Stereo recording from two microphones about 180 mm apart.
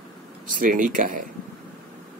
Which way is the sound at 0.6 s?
50° right (ahead or behind).